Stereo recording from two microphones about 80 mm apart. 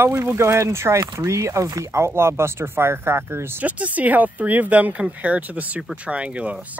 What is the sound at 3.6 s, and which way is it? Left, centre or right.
Speech, centre.